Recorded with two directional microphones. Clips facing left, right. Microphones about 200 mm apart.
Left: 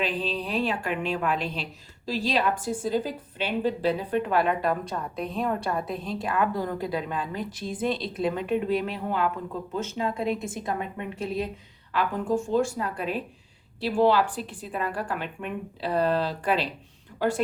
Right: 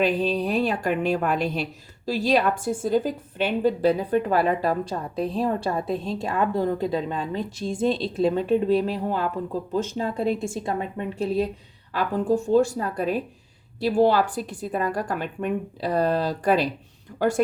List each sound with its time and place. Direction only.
0.0 s a woman's voice: 45° right (ahead or behind)